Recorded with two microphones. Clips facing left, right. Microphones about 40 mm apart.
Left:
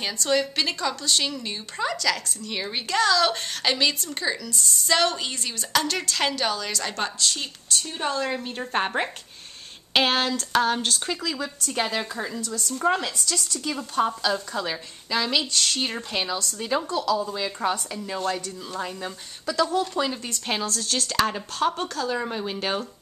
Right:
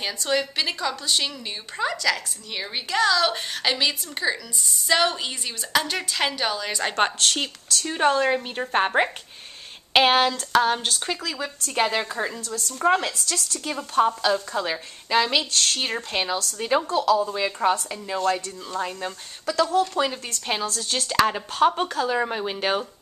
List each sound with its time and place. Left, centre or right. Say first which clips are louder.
0.0 s a woman's voice: left 1 dB; centre
6.8 s a woman's voice: right 6 dB; right
7.3 s speech: right 2 dB; right
8.2 s a woman's voice: right 5 dB; right
8.5 s a woman's voice: right 2 dB; centre
11.3 s a woman's voice: right 2 dB; right
18.1 s speech: right 4 dB; centre
19.5 s a woman's voice: right 2 dB; centre